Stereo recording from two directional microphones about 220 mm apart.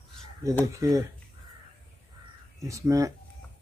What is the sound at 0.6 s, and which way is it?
Speech, 15° right (ahead or behind).